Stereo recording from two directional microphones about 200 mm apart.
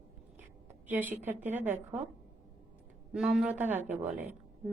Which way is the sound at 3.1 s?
Centre (ahead or behind).